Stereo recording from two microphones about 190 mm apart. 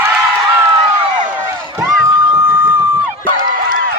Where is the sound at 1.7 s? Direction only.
15° right (ahead or behind).